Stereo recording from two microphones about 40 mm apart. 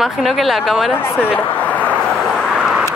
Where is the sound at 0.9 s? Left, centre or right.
Left.